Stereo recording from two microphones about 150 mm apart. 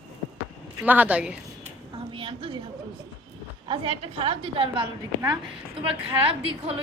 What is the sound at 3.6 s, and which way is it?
A woman's voice, 40° right (ahead or behind).